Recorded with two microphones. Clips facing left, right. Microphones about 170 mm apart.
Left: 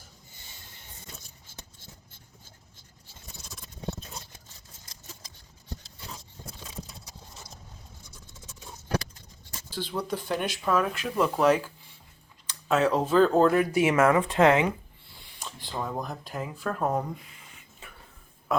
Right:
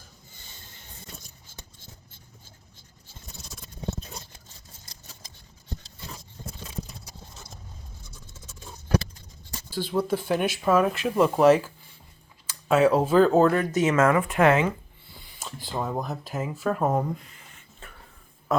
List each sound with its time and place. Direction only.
9.6 s speech: 10° right (ahead or behind)
13.5 s speech: 10° left (ahead or behind)
14.2 s speech: 25° left (ahead or behind)
15.1 s a sound: centre (ahead or behind)
15.8 s speech: 5° right (ahead or behind)